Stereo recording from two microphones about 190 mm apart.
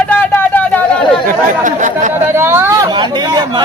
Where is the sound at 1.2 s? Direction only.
40° right (ahead or behind).